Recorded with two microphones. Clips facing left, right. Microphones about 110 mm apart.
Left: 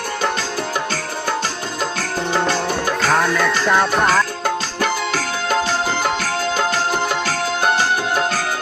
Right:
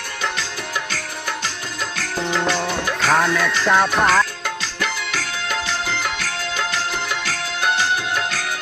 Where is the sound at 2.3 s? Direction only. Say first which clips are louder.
Left 2 dB; 35° left (ahead or behind).